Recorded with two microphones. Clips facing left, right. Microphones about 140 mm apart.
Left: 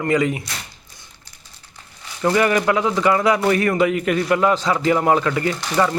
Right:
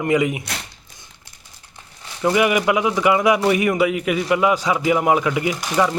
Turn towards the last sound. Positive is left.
turn(degrees=-10)  # may be behind; listen again after turning